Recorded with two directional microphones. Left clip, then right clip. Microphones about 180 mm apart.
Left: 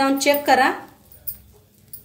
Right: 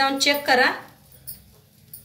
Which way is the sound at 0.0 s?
65° left (ahead or behind).